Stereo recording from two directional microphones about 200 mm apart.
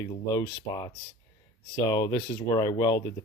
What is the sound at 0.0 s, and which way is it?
A man's voice, 20° left (ahead or behind).